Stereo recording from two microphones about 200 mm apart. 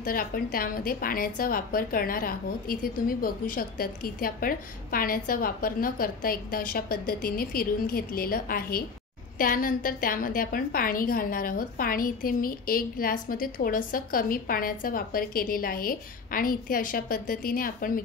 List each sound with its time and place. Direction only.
0.0 s a woman's voice: 45° left (ahead or behind)